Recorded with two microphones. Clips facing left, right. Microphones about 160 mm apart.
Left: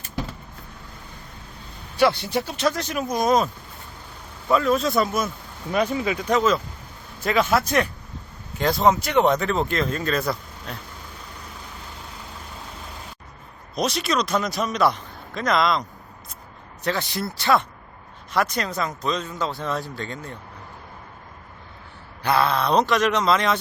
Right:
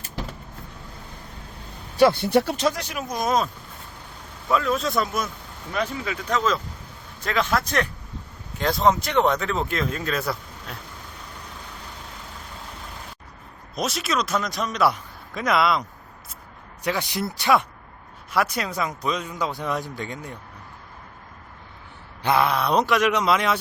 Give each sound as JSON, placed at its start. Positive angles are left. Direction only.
{"t": 2.0, "sound": "speech", "side_deg": -50}
{"t": 2.6, "sound": "speech", "side_deg": -10}
{"t": 3.0, "sound": "speech", "side_deg": 0}
{"t": 5.7, "sound": "speech", "side_deg": 15}
{"t": 13.7, "sound": "speech", "side_deg": -5}
{"t": 22.2, "sound": "speech", "side_deg": -15}